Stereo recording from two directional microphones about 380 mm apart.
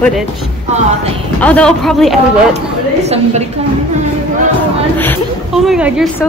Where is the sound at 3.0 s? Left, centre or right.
Centre.